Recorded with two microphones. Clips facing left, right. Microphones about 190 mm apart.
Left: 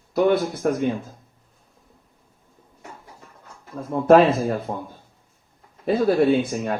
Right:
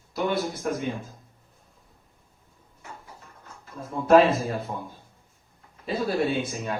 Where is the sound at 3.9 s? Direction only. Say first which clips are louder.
Left 3 dB; 55° left (ahead or behind).